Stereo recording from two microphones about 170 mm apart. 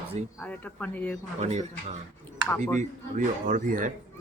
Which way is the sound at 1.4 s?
40° right (ahead or behind).